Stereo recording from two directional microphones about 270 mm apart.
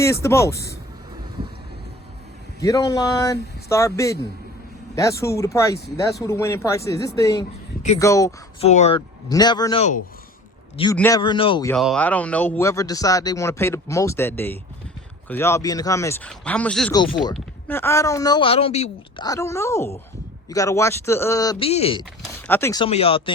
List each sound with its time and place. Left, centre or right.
0.0 s a man's voice: centre
2.6 s a man's voice: centre
8.6 s a man's voice: left
10.9 s a man's voice: centre
11.7 s a man's voice: centre
16.9 s a man's voice: centre
22.2 s a man's voice: centre